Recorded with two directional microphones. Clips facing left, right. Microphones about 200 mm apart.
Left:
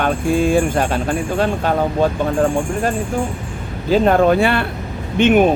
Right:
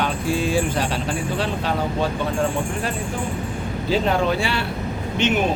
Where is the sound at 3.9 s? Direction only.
50° left (ahead or behind).